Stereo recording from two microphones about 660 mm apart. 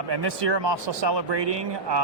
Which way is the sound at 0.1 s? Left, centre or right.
Right.